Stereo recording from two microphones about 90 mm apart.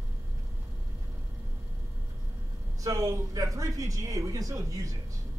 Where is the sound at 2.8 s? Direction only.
40° right (ahead or behind).